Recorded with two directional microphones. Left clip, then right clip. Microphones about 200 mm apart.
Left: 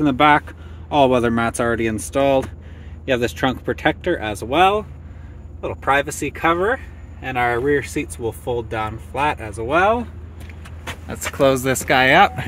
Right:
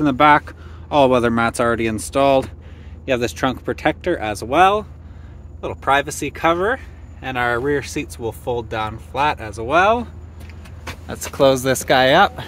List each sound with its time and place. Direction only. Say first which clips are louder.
0.0 s speech: right 1 dB; centre (ahead or behind)
10.9 s vehicle: left 2 dB; 5° left (ahead or behind)
11.5 s speech: right 1 dB; centre (ahead or behind)